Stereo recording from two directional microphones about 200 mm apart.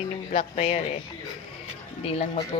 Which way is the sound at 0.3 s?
30° left (ahead or behind).